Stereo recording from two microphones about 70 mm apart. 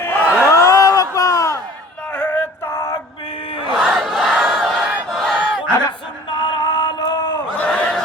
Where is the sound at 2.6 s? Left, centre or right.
Left.